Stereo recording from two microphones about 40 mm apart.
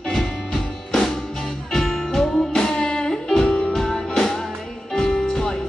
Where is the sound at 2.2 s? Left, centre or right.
Centre.